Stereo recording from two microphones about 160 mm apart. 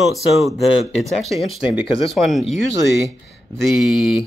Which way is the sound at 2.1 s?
Centre (ahead or behind).